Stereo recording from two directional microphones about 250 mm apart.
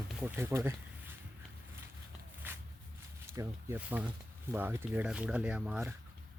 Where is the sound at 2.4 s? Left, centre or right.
Centre.